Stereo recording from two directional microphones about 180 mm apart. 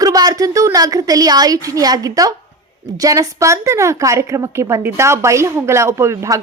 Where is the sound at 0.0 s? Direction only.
20° right (ahead or behind).